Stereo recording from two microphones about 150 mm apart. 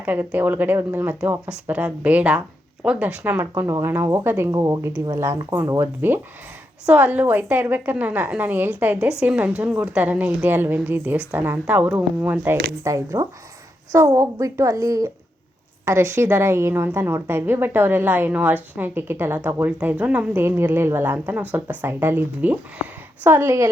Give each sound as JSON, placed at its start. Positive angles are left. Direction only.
{"t": 0.0, "sound": "a woman's voice", "side_deg": -10}
{"t": 12.8, "sound": "a woman's voice", "side_deg": -20}